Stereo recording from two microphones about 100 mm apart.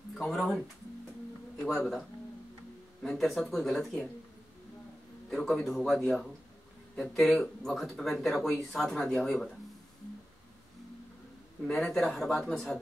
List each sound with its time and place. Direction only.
0.2 s speech: 5° left (ahead or behind)
3.0 s speech: 5° left (ahead or behind)
5.3 s speech: 5° left (ahead or behind)
11.6 s speech: 5° left (ahead or behind)